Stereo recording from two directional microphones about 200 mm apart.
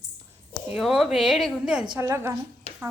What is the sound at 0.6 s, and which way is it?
Speech, centre (ahead or behind).